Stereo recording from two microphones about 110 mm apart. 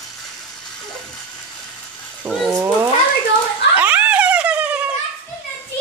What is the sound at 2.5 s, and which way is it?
Speech, 20° right (ahead or behind).